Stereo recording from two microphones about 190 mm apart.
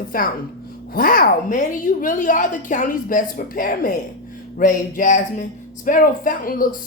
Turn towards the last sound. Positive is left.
turn(degrees=50)  # may be behind; listen again after turning